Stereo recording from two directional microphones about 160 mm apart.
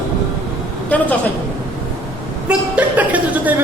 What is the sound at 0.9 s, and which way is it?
Speech, 10° left (ahead or behind).